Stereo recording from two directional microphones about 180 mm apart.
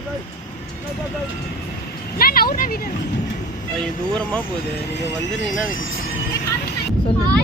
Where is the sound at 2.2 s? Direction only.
55° left (ahead or behind).